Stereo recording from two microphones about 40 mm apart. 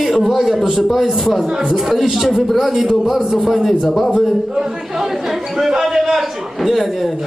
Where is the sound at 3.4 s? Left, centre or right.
Centre.